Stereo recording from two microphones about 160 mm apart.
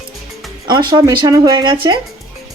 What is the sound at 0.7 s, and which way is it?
Speech, 30° right (ahead or behind).